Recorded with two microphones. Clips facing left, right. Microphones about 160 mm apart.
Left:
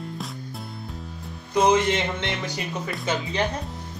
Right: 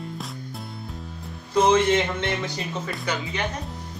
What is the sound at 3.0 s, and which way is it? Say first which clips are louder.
Speech: left 3 dB; 25° left (ahead or behind).